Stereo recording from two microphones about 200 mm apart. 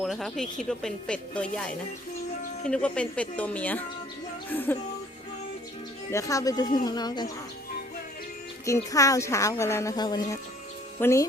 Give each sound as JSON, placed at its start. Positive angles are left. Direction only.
{"t": 0.0, "sound": "a woman's voice", "side_deg": 0}
{"t": 6.1, "sound": "a woman's voice", "side_deg": 15}
{"t": 8.6, "sound": "a woman's voice", "side_deg": 15}